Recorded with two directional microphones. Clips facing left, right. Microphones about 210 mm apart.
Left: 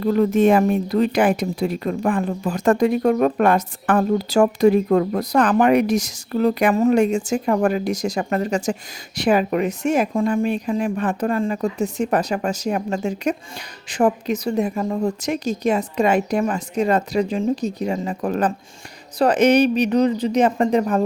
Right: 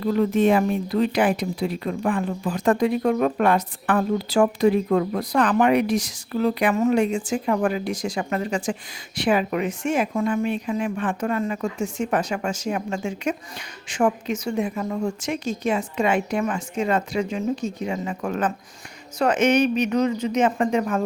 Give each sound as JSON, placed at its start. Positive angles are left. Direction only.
{"t": 0.0, "sound": "a woman's voice", "side_deg": 45}